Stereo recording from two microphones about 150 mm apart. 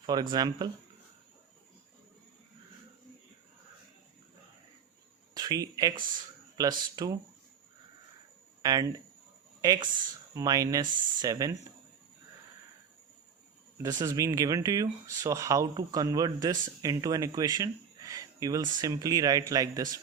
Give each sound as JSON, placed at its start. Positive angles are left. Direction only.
{"t": 0.0, "sound": "speech", "side_deg": -30}
{"t": 5.3, "sound": "speech", "side_deg": -25}
{"t": 8.6, "sound": "speech", "side_deg": -25}
{"t": 13.7, "sound": "speech", "side_deg": -25}